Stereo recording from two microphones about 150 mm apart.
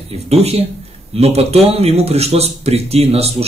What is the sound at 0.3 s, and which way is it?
Speech, 45° right (ahead or behind).